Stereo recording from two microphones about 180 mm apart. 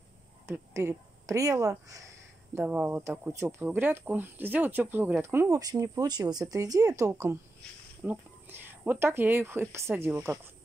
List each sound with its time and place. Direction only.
0.5 s speech: 15° right (ahead or behind)